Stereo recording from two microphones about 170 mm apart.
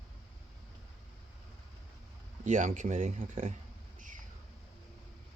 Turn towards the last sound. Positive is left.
turn(degrees=-40)  # may be behind; listen again after turning